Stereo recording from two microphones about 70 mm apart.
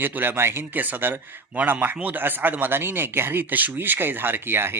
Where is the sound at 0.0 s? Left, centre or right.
Right.